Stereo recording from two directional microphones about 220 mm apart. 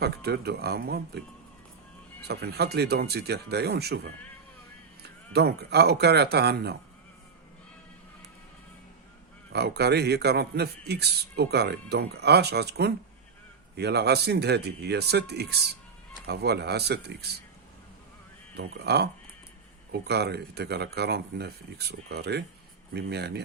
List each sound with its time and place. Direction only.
0.0 s a man's voice: 45° right (ahead or behind)
2.2 s a man's voice: 50° right (ahead or behind)
9.5 s a man's voice: 50° right (ahead or behind)
18.5 s a man's voice: 50° right (ahead or behind)